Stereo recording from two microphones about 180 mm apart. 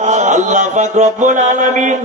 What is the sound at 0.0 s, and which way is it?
Speech, 40° right (ahead or behind).